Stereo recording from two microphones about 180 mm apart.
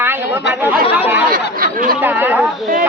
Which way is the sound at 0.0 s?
10° right (ahead or behind).